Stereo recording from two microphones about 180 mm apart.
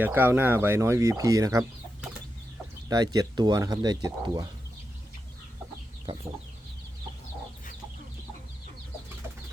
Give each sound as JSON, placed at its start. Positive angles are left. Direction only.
{"t": 0.0, "sound": "speech", "side_deg": -10}
{"t": 2.9, "sound": "speech", "side_deg": -20}